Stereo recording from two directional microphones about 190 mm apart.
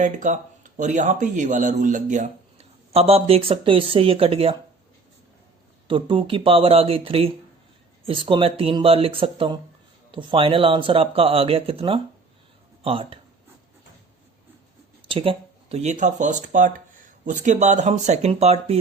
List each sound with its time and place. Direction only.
0.0 s speech: 40° right (ahead or behind)
5.9 s speech: 25° right (ahead or behind)
15.0 s speech: 30° right (ahead or behind)